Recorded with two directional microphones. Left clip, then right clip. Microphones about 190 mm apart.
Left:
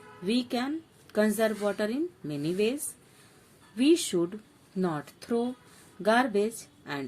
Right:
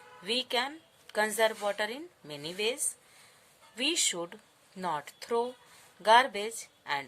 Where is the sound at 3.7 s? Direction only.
30° right (ahead or behind).